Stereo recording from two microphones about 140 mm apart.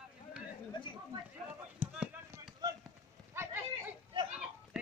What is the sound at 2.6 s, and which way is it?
Run, 30° right (ahead or behind).